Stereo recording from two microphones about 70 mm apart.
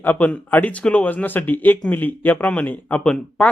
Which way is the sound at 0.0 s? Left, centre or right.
Left.